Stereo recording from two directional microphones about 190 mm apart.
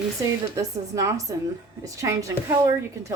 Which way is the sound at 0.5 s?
15° right (ahead or behind).